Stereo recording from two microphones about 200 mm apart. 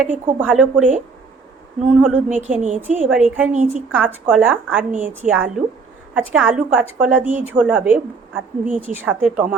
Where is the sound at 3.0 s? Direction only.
5° right (ahead or behind).